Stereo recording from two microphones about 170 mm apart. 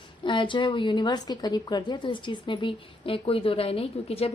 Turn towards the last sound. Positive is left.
turn(degrees=35)  # may be behind; listen again after turning